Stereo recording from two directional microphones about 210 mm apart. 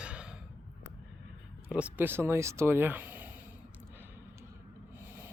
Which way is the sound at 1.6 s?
5° right (ahead or behind).